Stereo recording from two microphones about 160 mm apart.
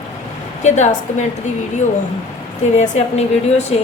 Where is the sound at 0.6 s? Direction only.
45° left (ahead or behind).